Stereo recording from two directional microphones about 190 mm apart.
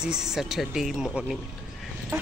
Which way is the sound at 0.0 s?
5° right (ahead or behind).